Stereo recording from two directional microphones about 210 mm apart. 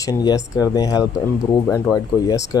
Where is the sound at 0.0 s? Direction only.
20° left (ahead or behind).